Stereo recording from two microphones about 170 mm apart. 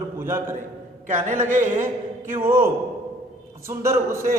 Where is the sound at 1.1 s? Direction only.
45° right (ahead or behind).